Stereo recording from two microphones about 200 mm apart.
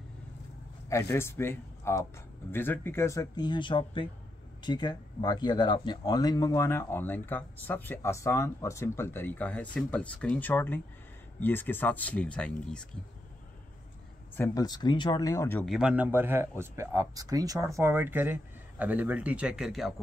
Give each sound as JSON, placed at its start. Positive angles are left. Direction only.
{"t": 0.8, "sound": "speech", "side_deg": 15}
{"t": 14.3, "sound": "speech", "side_deg": 15}
{"t": 15.7, "sound": "a man's voice", "side_deg": -5}